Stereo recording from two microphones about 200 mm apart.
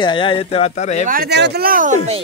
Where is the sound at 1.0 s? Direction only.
50° right (ahead or behind).